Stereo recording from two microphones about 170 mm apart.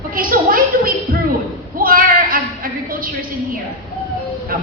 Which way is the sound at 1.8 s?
55° right (ahead or behind).